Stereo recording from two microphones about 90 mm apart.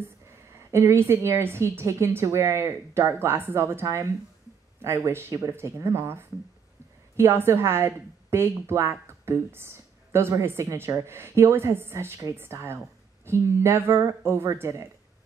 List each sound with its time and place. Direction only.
0.7 s a woman's voice: 30° right (ahead or behind)